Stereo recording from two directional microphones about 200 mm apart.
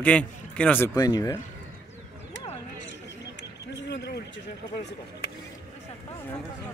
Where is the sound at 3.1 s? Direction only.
60° left (ahead or behind).